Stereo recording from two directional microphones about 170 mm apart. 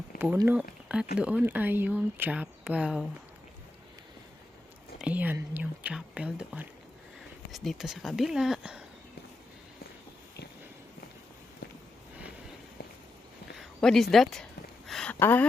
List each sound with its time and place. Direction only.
0.1 s a sound: 60° left (ahead or behind)
1.2 s speech: 10° right (ahead or behind)
4.9 s speech: 10° right (ahead or behind)
13.6 s speech: centre (ahead or behind)
14.8 s a sound: centre (ahead or behind)
15.2 s speech: 10° left (ahead or behind)